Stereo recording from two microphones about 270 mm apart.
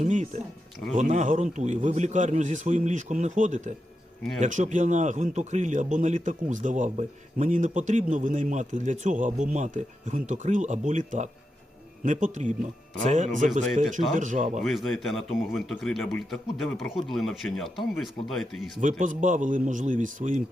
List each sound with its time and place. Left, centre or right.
0.0 s a sound: right
0.9 s a man's voice: right
14.6 s a man's voice: centre
18.8 s a man's voice: right